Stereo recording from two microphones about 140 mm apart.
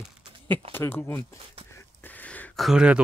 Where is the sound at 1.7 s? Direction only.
10° left (ahead or behind).